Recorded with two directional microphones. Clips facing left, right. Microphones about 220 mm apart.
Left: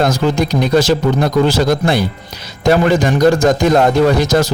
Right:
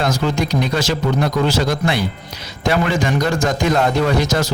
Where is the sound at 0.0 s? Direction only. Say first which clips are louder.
Left 5 dB; 40° left (ahead or behind).